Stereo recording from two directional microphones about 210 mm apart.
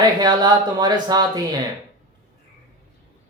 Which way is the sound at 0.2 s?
20° right (ahead or behind).